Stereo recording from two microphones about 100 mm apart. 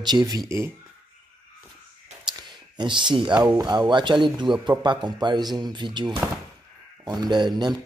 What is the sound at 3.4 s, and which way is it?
Speech, 45° right (ahead or behind).